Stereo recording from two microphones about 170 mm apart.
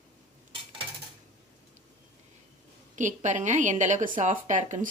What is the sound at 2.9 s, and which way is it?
A woman's voice, 45° right (ahead or behind).